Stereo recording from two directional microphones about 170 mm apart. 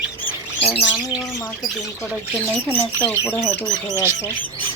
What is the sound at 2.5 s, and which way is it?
Speech, 10° left (ahead or behind).